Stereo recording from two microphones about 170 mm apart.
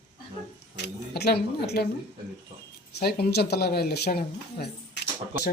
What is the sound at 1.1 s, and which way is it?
Speech, 70° left (ahead or behind).